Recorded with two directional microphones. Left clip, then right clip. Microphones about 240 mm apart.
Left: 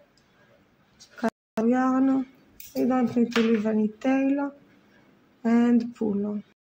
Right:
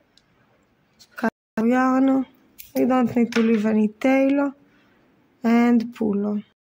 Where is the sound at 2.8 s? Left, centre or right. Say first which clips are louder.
Right 4 dB; right.